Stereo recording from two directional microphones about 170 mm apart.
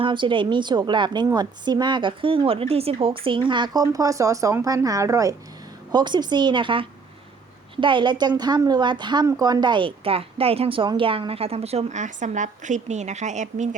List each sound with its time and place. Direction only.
0.0 s a woman's voice: 30° right (ahead or behind); by 13.7 s 45° right (ahead or behind)